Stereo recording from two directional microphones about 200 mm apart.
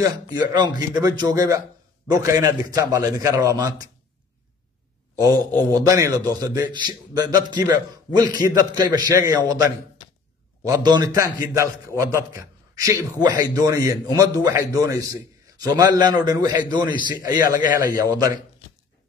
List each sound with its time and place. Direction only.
0.0 s a man's voice: 20° right (ahead or behind)
5.2 s a man's voice: 15° right (ahead or behind)
10.6 s a man's voice: 20° right (ahead or behind)